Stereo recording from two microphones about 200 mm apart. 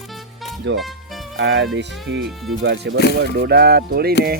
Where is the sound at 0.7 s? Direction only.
60° right (ahead or behind).